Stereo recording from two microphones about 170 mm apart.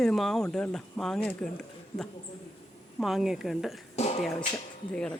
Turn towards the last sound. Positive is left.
turn(degrees=5)  # may be behind; listen again after turning